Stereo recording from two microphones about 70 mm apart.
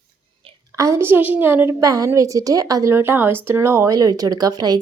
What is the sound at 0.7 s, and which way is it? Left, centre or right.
Speech, right.